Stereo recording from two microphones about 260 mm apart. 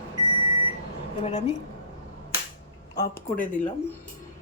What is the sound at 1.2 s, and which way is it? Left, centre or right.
Speech, left.